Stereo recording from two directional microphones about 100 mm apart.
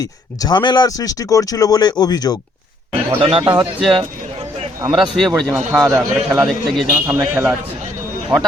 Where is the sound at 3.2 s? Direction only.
70° right (ahead or behind); by 3.7 s 50° right (ahead or behind).